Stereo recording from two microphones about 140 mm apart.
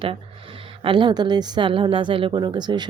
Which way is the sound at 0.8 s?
35° right (ahead or behind).